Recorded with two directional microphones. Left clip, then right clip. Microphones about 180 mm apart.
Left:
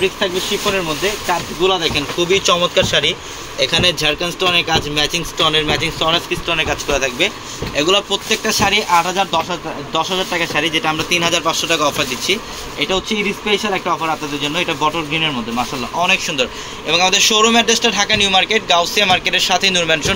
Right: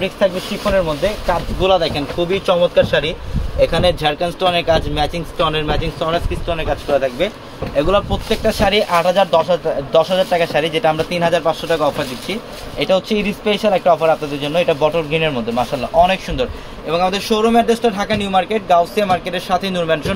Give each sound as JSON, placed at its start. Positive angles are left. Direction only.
{"t": 1.6, "sound": "speech", "side_deg": -70}
{"t": 2.2, "sound": "speech", "side_deg": -40}
{"t": 7.7, "sound": "speech", "side_deg": -45}
{"t": 16.9, "sound": "speech", "side_deg": -50}